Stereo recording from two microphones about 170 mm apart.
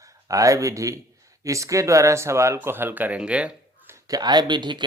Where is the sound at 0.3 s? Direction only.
20° right (ahead or behind).